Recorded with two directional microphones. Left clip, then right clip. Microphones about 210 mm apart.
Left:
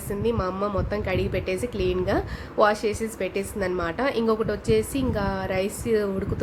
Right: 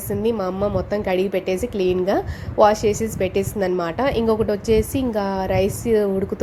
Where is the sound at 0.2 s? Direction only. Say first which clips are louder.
Right 4 dB; 15° right (ahead or behind).